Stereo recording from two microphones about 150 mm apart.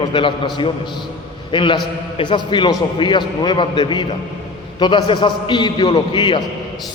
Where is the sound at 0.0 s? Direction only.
35° left (ahead or behind).